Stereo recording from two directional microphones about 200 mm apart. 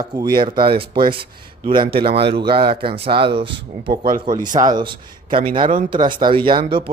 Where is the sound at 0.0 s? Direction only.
20° right (ahead or behind).